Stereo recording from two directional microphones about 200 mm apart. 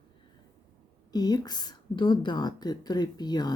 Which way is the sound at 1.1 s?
20° left (ahead or behind).